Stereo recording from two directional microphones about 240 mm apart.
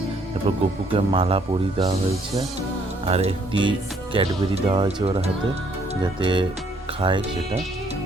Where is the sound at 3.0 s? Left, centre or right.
Right.